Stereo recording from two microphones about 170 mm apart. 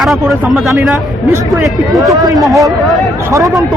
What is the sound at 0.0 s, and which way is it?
Speech, centre (ahead or behind).